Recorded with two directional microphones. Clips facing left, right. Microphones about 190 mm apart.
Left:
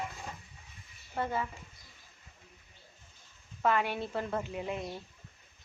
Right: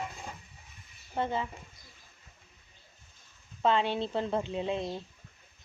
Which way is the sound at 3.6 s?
25° right (ahead or behind).